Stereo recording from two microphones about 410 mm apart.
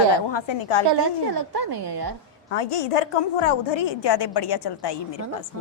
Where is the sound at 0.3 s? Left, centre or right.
Left.